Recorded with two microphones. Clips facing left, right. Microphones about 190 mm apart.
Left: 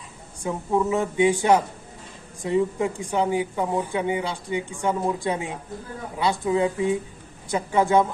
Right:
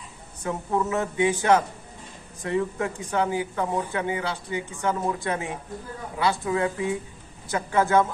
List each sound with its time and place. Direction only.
0.4 s a woman's voice: 15° left (ahead or behind)